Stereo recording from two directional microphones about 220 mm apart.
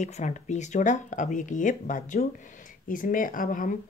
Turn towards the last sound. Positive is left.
turn(degrees=35)  # may be behind; listen again after turning